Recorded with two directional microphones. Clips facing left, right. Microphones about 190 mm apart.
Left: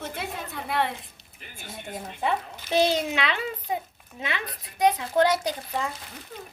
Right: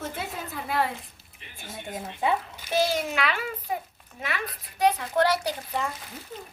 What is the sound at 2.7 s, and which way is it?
A child's voice, 25° left (ahead or behind).